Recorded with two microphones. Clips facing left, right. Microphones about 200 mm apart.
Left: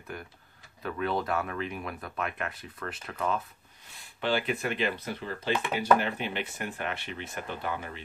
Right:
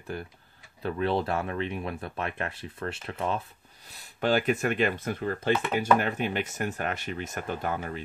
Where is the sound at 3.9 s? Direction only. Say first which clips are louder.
Right 4 dB; 45° right (ahead or behind).